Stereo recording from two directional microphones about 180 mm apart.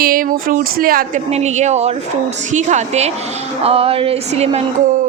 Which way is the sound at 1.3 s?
40° right (ahead or behind).